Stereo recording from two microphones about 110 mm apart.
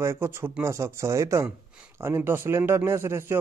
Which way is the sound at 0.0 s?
25° right (ahead or behind).